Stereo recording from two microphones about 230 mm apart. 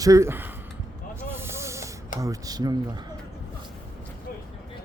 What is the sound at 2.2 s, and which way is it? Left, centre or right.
Speech, centre.